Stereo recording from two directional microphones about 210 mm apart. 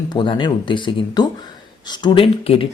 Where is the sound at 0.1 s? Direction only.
25° left (ahead or behind).